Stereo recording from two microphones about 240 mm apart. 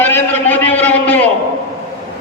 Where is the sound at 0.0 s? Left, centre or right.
Centre.